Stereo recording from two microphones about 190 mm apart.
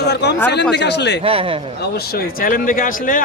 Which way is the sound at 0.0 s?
60° left (ahead or behind).